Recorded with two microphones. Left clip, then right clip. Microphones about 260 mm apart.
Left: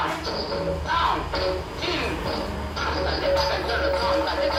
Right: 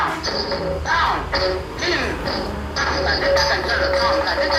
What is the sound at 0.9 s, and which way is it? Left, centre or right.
Music, right.